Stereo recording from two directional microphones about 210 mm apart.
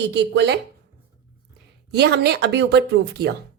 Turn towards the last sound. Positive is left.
turn(degrees=-50)  # may be behind; listen again after turning